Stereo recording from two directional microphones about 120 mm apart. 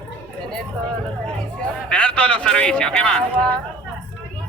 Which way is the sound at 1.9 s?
10° left (ahead or behind).